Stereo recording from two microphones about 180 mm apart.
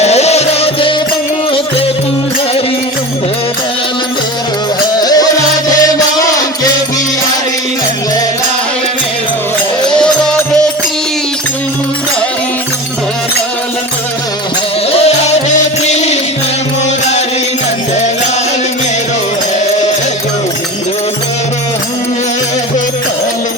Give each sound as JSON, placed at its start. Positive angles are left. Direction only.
{"t": 0.0, "sound": "music", "side_deg": 35}
{"t": 4.9, "sound": "music", "side_deg": 20}
{"t": 9.9, "sound": "music", "side_deg": 5}
{"t": 14.9, "sound": "music", "side_deg": 35}